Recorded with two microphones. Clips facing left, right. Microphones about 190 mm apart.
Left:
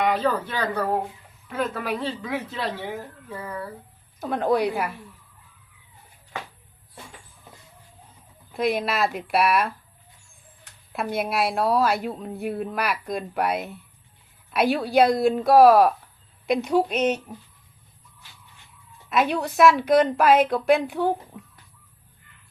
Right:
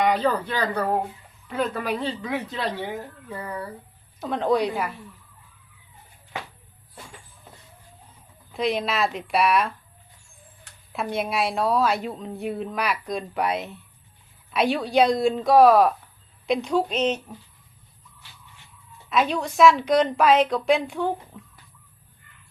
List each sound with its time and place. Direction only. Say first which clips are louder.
0.0 s a woman's voice: right 1 dB; 5° left (ahead or behind)
8.5 s a woman's voice: left 1 dB; centre (ahead or behind)
10.9 s a woman's voice: left 1 dB; 5° left (ahead or behind)
19.4 s a woman's voice: right 1 dB; 5° left (ahead or behind)